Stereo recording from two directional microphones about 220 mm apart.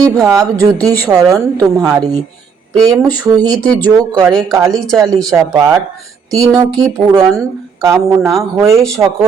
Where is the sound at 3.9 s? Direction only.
15° right (ahead or behind).